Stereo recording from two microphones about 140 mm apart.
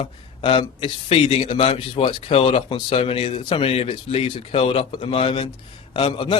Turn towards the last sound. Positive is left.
turn(degrees=40)  # may be behind; listen again after turning